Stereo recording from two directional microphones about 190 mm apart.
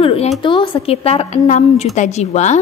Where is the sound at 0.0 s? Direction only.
30° left (ahead or behind).